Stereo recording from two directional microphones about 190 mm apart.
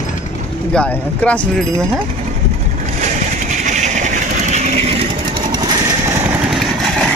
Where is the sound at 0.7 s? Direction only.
5° left (ahead or behind).